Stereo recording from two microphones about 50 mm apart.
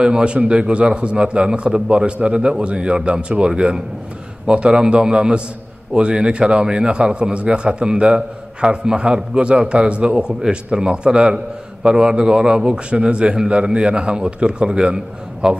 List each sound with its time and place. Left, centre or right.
0.0 s a man's voice: centre